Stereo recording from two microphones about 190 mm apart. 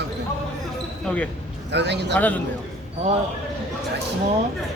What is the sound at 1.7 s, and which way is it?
Speech, 65° right (ahead or behind).